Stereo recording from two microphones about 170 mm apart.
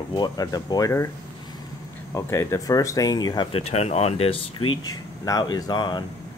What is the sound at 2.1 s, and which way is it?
Speech, 15° left (ahead or behind).